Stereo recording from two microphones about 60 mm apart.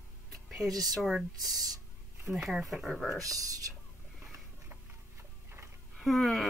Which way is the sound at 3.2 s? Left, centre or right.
Right.